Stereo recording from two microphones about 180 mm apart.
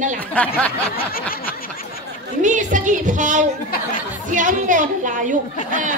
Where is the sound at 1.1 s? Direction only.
55° left (ahead or behind).